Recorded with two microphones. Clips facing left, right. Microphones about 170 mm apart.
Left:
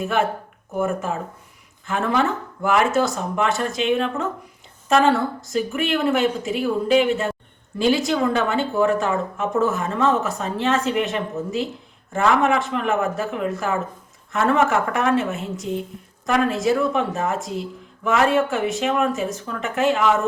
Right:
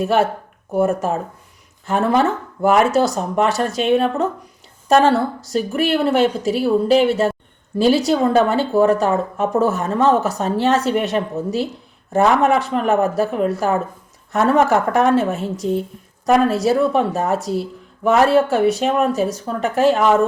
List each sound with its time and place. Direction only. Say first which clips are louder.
0.8 s a woman's voice: right 5 dB; 40° right (ahead or behind)